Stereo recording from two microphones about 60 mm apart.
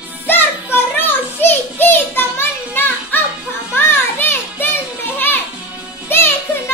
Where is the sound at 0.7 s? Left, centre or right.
Left.